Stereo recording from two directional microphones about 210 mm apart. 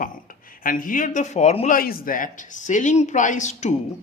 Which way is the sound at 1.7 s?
45° left (ahead or behind).